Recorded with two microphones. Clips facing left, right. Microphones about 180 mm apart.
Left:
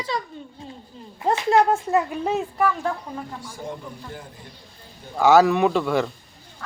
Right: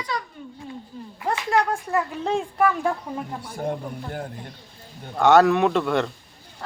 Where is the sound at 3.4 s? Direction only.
60° right (ahead or behind).